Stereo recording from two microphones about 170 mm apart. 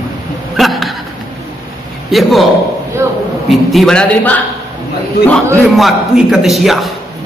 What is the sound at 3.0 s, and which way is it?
Speech, 20° right (ahead or behind).